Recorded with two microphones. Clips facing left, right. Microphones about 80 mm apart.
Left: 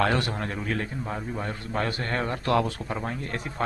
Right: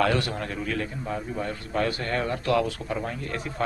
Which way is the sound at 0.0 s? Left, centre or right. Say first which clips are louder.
Right 1 dB; left.